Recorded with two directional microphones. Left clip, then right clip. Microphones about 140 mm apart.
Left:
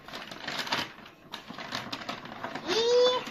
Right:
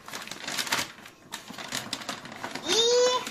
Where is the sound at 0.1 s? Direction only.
20° right (ahead or behind).